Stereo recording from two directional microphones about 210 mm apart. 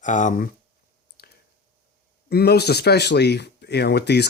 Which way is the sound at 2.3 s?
50° left (ahead or behind).